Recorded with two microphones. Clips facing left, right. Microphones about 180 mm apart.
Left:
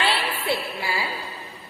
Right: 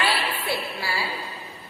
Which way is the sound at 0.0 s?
25° left (ahead or behind).